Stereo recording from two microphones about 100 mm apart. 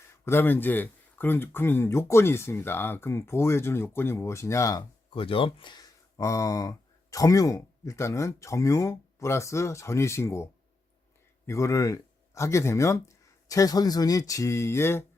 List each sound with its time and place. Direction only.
0.3 s speech: 20° left (ahead or behind)
5.1 s speech: 65° left (ahead or behind)
6.1 s speech: 35° left (ahead or behind)